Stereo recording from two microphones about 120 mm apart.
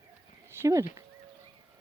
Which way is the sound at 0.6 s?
25° right (ahead or behind).